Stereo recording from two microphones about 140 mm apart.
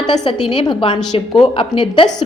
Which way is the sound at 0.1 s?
30° left (ahead or behind).